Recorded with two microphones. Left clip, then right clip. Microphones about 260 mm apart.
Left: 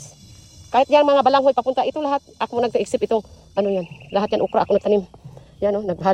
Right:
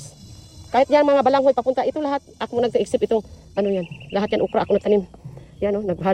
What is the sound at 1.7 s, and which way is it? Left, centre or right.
Speech, left.